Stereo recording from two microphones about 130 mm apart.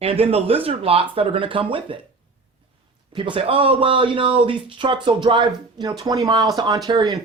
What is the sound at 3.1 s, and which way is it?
Speech, 40° right (ahead or behind).